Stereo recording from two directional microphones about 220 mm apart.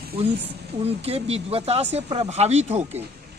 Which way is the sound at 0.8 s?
25° right (ahead or behind).